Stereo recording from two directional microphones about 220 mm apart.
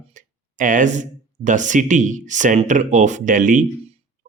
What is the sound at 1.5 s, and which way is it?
Speech, 35° right (ahead or behind).